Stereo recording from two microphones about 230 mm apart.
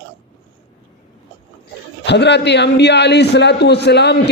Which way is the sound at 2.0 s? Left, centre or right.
Left.